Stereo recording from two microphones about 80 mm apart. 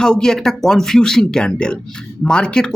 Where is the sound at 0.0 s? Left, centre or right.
Centre.